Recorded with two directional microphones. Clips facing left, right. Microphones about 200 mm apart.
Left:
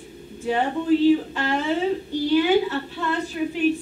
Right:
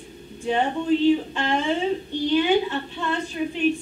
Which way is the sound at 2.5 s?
20° right (ahead or behind).